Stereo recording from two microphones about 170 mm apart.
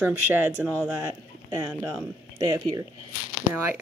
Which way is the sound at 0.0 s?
10° right (ahead or behind).